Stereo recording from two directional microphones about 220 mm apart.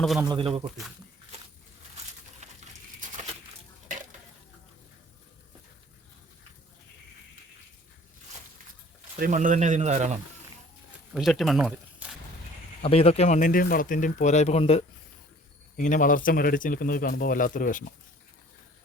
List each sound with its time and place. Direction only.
0.0 s speech: centre (ahead or behind)
0.3 s speech: 25° right (ahead or behind)
1.3 s a sound: 30° right (ahead or behind)
2.4 s patter: 30° right (ahead or behind)
9.1 s speech: 40° right (ahead or behind)
11.1 s speech: centre (ahead or behind)
12.8 s speech: 25° left (ahead or behind)